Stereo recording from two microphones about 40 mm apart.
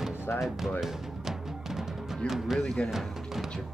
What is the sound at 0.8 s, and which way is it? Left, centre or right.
Music, centre.